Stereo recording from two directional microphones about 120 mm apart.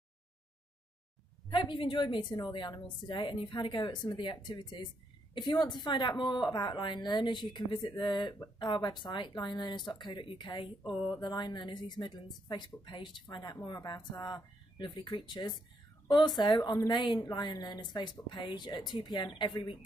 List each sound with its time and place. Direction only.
1.5 s a woman's voice: 40° left (ahead or behind)